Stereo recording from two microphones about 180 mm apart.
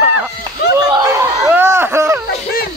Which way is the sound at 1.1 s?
15° right (ahead or behind).